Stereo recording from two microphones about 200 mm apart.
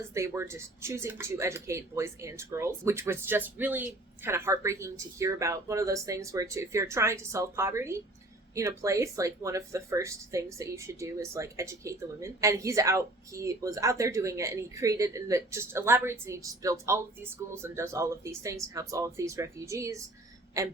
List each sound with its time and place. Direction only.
0.1 s speech: 15° right (ahead or behind)